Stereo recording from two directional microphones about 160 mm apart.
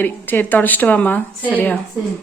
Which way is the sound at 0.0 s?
10° left (ahead or behind).